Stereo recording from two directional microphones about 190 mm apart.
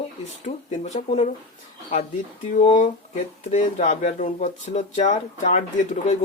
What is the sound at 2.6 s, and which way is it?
Speech, 35° left (ahead or behind).